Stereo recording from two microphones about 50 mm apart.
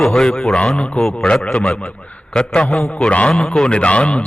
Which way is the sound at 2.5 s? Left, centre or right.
Centre.